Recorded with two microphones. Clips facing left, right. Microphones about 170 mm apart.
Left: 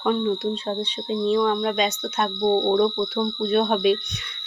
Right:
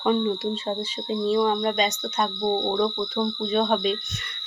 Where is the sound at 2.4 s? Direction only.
10° left (ahead or behind).